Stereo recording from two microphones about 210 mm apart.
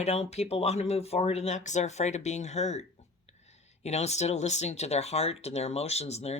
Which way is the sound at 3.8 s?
30° left (ahead or behind).